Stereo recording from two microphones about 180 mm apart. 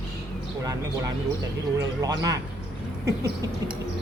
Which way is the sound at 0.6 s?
20° right (ahead or behind).